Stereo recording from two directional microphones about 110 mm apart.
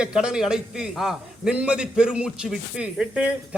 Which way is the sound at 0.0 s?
5° right (ahead or behind).